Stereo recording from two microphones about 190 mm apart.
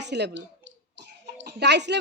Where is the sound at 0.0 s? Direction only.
65° right (ahead or behind).